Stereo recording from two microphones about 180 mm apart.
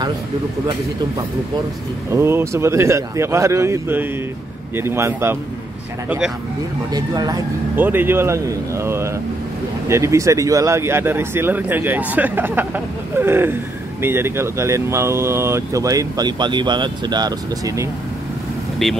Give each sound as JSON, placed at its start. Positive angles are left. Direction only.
{"t": 2.0, "sound": "speech", "side_deg": -15}
{"t": 6.0, "sound": "speech", "side_deg": -5}
{"t": 6.9, "sound": "speech", "side_deg": -20}
{"t": 7.7, "sound": "speech", "side_deg": -10}